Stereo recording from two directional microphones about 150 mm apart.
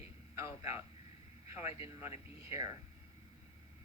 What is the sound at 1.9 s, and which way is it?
Speech, 15° right (ahead or behind).